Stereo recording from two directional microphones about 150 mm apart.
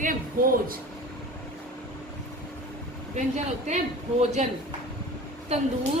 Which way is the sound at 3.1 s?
50° right (ahead or behind).